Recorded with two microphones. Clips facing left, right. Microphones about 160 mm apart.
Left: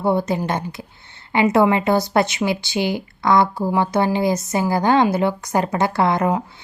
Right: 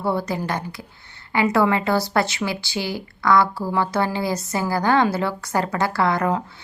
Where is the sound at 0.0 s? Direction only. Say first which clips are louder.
Left 4 dB; 20° left (ahead or behind).